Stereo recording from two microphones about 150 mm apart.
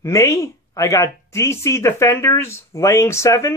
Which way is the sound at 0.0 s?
20° left (ahead or behind).